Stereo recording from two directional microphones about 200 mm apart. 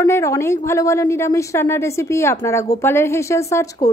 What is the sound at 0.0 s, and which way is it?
A woman's voice, 15° left (ahead or behind).